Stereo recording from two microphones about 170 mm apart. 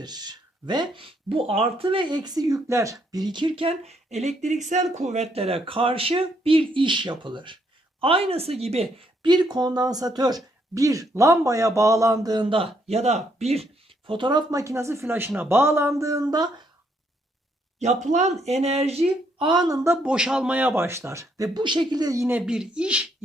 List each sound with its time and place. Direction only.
0.0 s a woman's voice: 25° right (ahead or behind)
14.1 s a woman's voice: 25° right (ahead or behind)
17.7 s speech: 45° right (ahead or behind); by 20.0 s 20° right (ahead or behind)
20.0 s speech: 5° right (ahead or behind)